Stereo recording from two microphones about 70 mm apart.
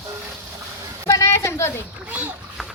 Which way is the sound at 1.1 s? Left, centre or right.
Left.